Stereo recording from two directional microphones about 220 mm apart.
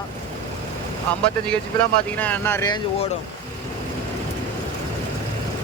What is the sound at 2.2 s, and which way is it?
Speech, 10° left (ahead or behind).